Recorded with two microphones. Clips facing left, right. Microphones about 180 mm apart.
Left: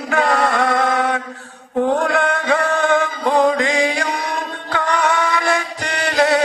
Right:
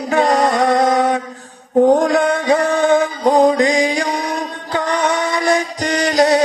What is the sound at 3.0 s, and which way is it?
Music, 40° right (ahead or behind).